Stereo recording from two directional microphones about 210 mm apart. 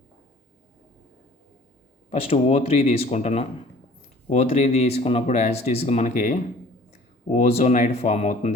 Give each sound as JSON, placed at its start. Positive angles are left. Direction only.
{"t": 2.0, "sound": "speech", "side_deg": 30}